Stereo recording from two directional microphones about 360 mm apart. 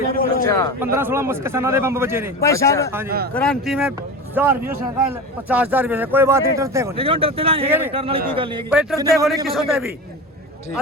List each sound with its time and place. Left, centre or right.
0.0 s a sound: left
0.4 s speech: centre
0.9 s speech: centre
2.4 s a man's voice: centre
8.8 s a man's voice: centre